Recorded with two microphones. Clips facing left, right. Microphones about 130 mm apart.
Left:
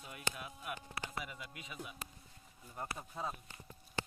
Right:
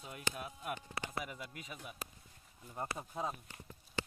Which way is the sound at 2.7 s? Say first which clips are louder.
Right 3 dB; 20° right (ahead or behind).